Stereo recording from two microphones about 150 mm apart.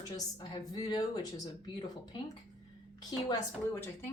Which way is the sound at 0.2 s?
25° left (ahead or behind).